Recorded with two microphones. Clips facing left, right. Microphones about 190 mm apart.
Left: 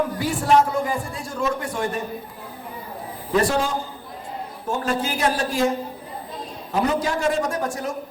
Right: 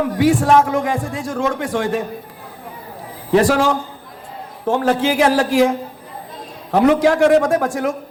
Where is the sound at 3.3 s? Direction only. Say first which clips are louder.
Right 6 dB; 90° right.